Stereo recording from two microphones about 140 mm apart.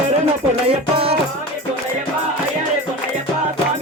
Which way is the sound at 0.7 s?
45° right (ahead or behind).